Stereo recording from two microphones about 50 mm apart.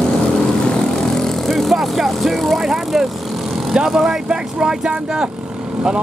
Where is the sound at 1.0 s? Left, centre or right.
Centre.